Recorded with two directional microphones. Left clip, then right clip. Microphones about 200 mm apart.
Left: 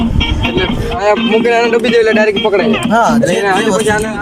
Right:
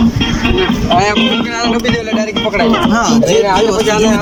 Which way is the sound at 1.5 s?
55° left (ahead or behind).